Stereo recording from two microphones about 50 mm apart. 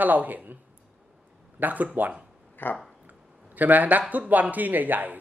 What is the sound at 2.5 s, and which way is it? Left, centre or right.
Speech, left.